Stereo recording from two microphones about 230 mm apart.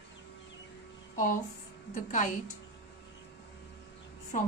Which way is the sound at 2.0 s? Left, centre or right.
Left.